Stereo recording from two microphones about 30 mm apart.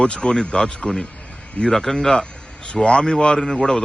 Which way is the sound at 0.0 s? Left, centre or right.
Left.